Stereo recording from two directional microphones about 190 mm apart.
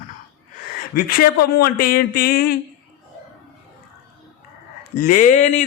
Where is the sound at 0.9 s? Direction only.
50° left (ahead or behind).